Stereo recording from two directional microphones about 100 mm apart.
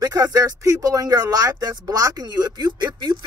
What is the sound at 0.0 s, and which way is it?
Speech, 40° right (ahead or behind).